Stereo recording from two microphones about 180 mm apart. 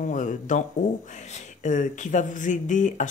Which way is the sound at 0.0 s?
45° left (ahead or behind).